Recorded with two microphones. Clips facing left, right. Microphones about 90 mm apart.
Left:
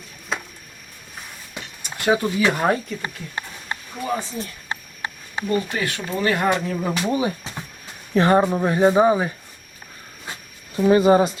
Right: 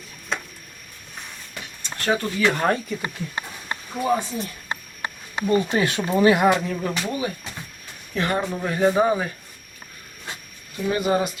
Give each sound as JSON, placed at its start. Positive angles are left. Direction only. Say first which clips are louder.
{"t": 0.3, "sound": "a sound", "louder": "left 1 dB", "side_deg": 5}
{"t": 1.5, "sound": "speech", "louder": "left 1 dB", "side_deg": 15}
{"t": 3.9, "sound": "speech", "louder": "right 4 dB", "side_deg": -20}
{"t": 5.5, "sound": "speech", "louder": "right 3 dB", "side_deg": -25}
{"t": 10.8, "sound": "speech", "louder": "left 7 dB", "side_deg": 30}